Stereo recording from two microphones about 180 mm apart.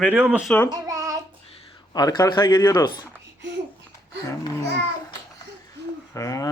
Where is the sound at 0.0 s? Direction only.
10° right (ahead or behind).